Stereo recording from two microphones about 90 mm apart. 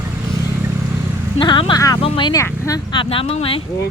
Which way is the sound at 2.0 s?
80° left.